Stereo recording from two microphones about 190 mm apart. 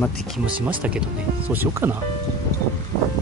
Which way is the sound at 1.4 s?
10° right (ahead or behind).